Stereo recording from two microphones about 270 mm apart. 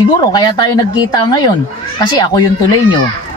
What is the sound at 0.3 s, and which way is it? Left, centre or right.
Speech, centre.